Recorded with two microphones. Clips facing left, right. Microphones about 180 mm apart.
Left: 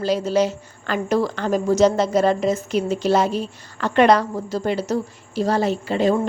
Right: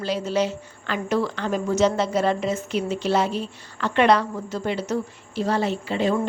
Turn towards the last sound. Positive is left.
turn(degrees=40)  # may be behind; listen again after turning